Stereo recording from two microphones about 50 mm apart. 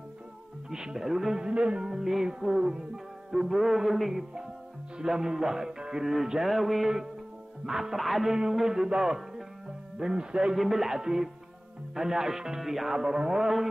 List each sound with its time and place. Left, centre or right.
0.7 s music: centre
1.5 s music: right
1.9 s music: centre